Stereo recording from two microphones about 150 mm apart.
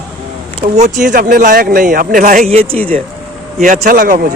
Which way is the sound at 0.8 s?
55° right (ahead or behind).